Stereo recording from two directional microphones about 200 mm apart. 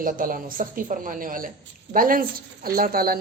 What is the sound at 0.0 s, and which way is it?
Speech, 45° right (ahead or behind).